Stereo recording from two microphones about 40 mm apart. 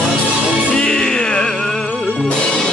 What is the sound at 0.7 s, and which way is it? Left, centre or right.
Music, centre.